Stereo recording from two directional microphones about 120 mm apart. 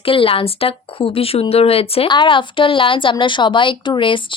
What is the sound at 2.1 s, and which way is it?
Speech, 40° left (ahead or behind).